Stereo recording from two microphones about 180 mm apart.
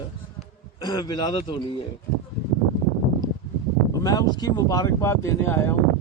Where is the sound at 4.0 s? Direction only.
20° left (ahead or behind).